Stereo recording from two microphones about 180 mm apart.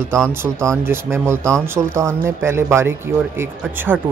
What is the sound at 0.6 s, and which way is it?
Speech, 15° right (ahead or behind).